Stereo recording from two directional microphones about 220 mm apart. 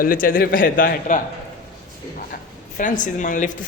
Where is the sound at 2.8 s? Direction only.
35° left (ahead or behind).